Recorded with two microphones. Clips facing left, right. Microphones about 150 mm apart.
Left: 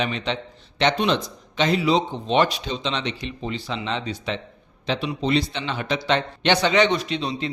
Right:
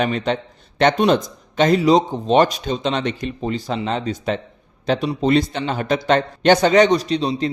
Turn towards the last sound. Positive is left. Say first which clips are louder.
# right 6 dB
turn(degrees=-35)  # may be behind; listen again after turning